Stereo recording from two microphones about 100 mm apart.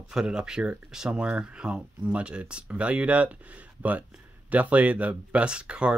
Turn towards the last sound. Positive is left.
turn(degrees=-10)  # may be behind; listen again after turning